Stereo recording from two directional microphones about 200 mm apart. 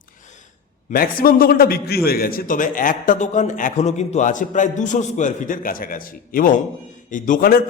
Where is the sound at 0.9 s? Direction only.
45° left (ahead or behind).